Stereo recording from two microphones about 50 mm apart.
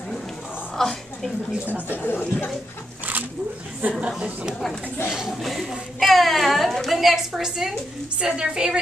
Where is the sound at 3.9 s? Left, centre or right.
Centre.